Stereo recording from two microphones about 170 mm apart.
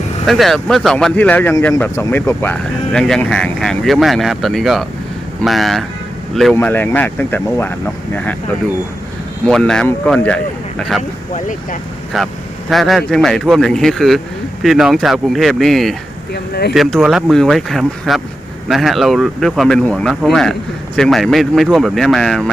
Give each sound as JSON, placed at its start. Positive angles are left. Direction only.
{"t": 0.3, "sound": "speech", "side_deg": 0}
{"t": 9.4, "sound": "speech", "side_deg": 5}
{"t": 11.3, "sound": "speech", "side_deg": 50}
{"t": 12.1, "sound": "speech", "side_deg": 0}
{"t": 16.3, "sound": "speech", "side_deg": 70}
{"t": 16.7, "sound": "speech", "side_deg": 0}